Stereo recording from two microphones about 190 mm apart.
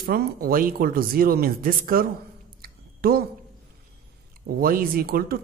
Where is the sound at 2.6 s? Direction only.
55° right (ahead or behind).